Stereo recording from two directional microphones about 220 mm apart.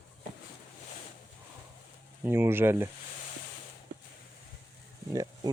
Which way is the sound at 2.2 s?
10° right (ahead or behind).